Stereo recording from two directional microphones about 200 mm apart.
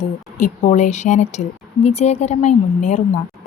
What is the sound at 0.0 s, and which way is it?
Speech, 35° left (ahead or behind).